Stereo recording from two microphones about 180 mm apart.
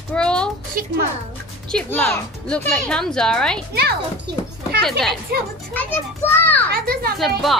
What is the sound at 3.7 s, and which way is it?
Speech, 60° right (ahead or behind).